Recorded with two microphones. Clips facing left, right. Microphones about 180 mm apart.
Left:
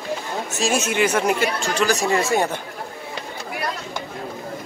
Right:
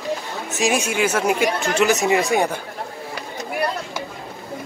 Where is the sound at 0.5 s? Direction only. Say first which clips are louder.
Right 1 dB; 15° right (ahead or behind).